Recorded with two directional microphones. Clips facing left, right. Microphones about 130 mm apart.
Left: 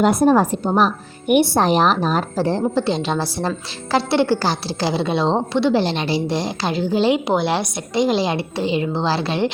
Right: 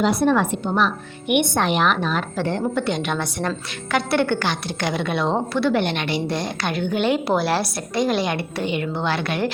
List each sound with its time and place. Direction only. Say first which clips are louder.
0.0 s a woman's voice: left 4 dB; 45° left (ahead or behind); by 9.5 s 30° left (ahead or behind)